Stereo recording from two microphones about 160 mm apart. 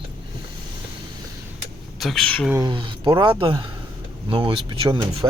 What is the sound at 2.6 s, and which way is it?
Speech, 25° right (ahead or behind).